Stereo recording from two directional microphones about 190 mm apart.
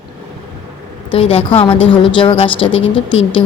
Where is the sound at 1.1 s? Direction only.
30° left (ahead or behind).